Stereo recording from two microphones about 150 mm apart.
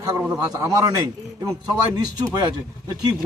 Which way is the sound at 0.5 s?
25° right (ahead or behind).